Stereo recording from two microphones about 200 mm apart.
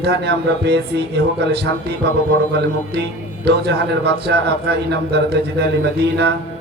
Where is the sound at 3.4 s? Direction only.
55° right (ahead or behind).